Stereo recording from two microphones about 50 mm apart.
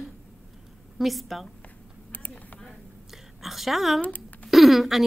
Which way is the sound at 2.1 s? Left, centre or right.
Left.